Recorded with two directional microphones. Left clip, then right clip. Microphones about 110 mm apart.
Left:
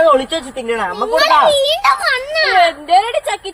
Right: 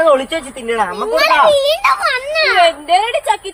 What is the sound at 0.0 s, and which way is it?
Speech, 20° right (ahead or behind).